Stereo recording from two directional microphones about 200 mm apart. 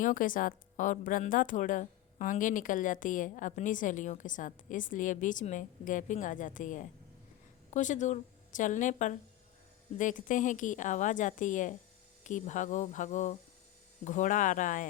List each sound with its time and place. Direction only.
0.0 s a woman's voice: 40° left (ahead or behind)